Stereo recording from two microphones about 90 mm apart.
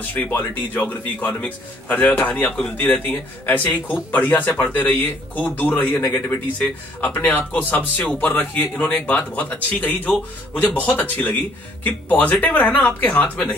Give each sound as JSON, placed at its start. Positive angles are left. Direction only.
{"t": 0.0, "sound": "a man's voice", "side_deg": 20}